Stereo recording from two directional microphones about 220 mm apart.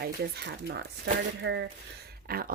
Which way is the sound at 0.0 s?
50° right (ahead or behind).